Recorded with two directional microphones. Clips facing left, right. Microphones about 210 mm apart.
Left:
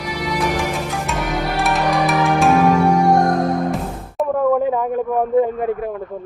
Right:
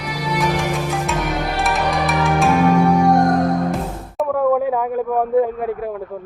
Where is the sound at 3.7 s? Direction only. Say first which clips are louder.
Even; 5° right (ahead or behind).